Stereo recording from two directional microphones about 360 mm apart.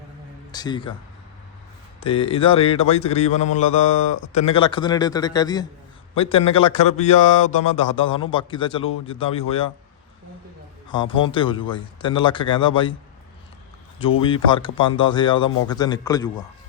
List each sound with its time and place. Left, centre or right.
0.5 s speech: centre
2.0 s speech: centre
10.8 s speech: centre
14.2 s speech: centre